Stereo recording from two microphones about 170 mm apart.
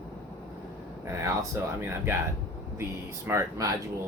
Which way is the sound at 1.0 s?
15° right (ahead or behind).